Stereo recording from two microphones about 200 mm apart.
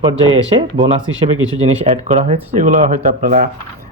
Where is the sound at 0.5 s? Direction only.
25° right (ahead or behind); by 3.4 s 40° right (ahead or behind).